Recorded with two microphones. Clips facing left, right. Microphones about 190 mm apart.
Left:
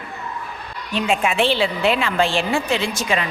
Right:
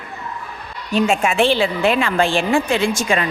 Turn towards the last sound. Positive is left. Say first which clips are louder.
# right 3 dB
turn(degrees=-50)  # may be behind; listen again after turning